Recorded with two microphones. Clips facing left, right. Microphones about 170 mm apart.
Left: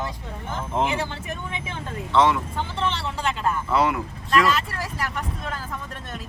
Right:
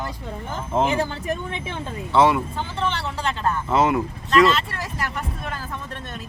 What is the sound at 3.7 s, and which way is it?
Speech, 20° right (ahead or behind).